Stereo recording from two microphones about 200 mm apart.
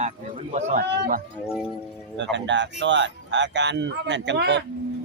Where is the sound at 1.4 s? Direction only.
5° right (ahead or behind).